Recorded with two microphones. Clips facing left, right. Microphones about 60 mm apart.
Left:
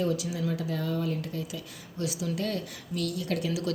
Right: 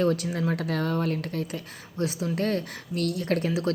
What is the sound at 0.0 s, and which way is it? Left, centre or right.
Speech, right.